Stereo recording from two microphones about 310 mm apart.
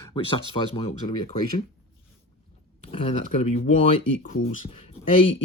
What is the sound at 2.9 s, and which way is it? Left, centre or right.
Speech, centre.